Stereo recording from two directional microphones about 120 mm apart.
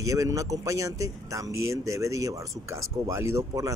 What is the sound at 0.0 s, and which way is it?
Speech, 30° right (ahead or behind).